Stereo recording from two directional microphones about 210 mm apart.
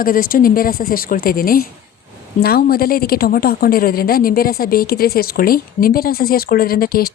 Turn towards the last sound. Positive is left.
turn(degrees=45)  # may be behind; listen again after turning